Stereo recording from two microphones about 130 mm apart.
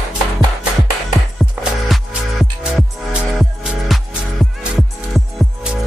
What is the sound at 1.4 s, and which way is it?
Music, 5° right (ahead or behind).